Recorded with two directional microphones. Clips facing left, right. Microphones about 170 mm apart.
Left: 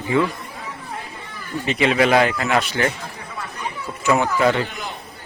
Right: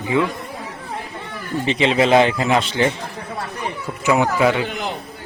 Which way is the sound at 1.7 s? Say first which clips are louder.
Right 1 dB; 25° right (ahead or behind).